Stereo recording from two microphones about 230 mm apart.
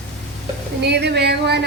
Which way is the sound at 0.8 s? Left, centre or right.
Right.